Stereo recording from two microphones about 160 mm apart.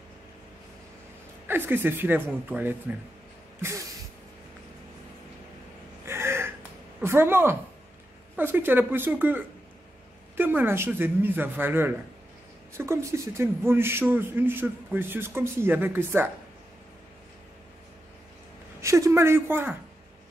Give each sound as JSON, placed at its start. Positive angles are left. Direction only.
{"t": 1.5, "sound": "a man's voice", "side_deg": -15}
{"t": 6.0, "sound": "gasp", "side_deg": -15}
{"t": 7.0, "sound": "a man's voice", "side_deg": -15}
{"t": 18.8, "sound": "a man's voice", "side_deg": -20}